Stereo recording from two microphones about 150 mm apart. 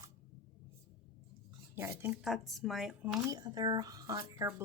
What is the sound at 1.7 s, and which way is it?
Speech, 15° right (ahead or behind).